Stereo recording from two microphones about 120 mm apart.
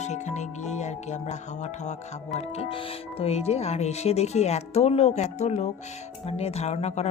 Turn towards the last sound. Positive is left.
turn(degrees=70)  # may be behind; listen again after turning